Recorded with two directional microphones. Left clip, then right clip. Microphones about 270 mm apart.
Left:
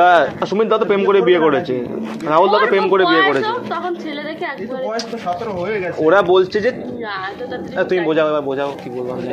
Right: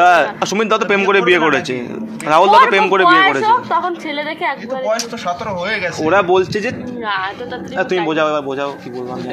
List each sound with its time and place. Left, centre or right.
0.0 s speech: centre
6.0 s speech: centre